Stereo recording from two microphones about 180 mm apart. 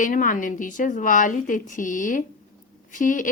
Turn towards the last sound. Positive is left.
turn(degrees=45)  # may be behind; listen again after turning